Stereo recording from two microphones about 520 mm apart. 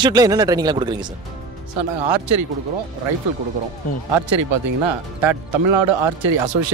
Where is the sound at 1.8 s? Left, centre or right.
Right.